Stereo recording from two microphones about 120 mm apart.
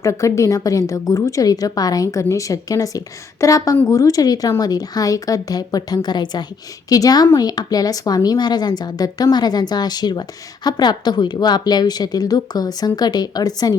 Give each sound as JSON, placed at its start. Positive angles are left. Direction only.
{"t": 0.0, "sound": "a woman's voice", "side_deg": 25}